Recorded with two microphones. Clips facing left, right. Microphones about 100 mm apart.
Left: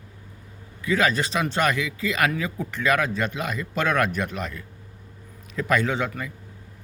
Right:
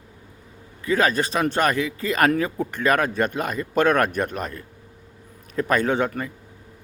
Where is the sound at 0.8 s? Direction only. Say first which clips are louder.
Right 2 dB; 40° right (ahead or behind).